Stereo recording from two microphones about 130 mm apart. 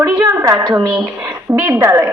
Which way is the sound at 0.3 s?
25° right (ahead or behind).